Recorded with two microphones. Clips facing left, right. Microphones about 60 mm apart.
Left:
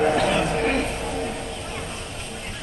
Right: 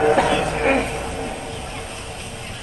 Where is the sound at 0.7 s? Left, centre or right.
Centre.